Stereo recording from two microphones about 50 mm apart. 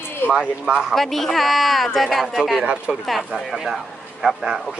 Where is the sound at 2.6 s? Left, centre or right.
Right.